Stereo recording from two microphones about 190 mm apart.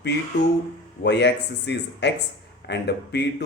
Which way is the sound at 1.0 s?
65° left (ahead or behind).